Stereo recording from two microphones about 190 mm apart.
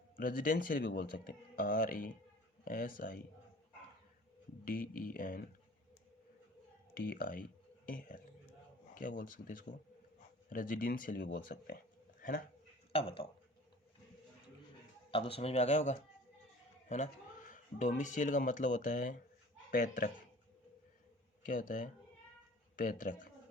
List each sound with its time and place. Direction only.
0.2 s speech: 45° left (ahead or behind)
4.6 s speech: 45° left (ahead or behind)
7.0 s speech: 50° left (ahead or behind)
12.9 s speech: 30° left (ahead or behind)
15.1 s speech: 30° left (ahead or behind)
21.4 s speech: 45° left (ahead or behind)